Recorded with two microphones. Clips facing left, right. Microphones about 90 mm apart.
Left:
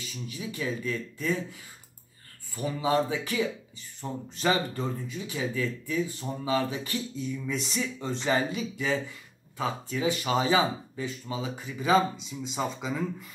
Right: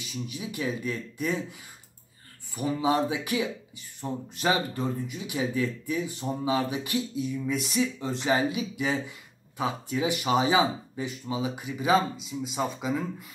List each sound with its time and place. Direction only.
0.1 s speech: 15° right (ahead or behind)
2.5 s speech: 20° right (ahead or behind)